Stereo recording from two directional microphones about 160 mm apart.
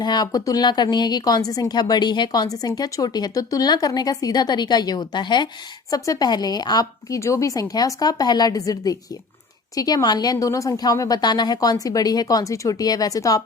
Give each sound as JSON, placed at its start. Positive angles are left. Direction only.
{"t": 0.0, "sound": "a woman's voice", "side_deg": 25}